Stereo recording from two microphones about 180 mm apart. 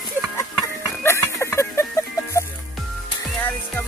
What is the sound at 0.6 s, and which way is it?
Music, 15° left (ahead or behind).